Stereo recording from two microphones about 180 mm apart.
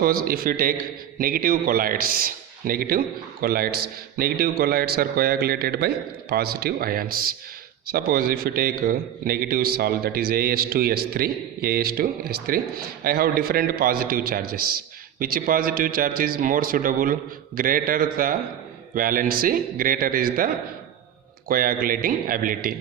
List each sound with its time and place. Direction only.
0.0 s a man's voice: 55° right (ahead or behind)